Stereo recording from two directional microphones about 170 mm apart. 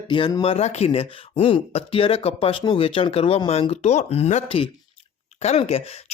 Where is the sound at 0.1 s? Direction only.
30° left (ahead or behind).